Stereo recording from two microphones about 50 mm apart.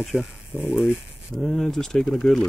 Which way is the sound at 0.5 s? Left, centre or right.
Right.